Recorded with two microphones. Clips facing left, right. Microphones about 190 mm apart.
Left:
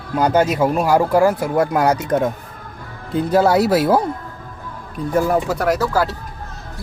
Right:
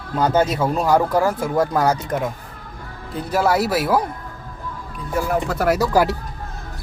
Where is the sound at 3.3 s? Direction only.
25° left (ahead or behind).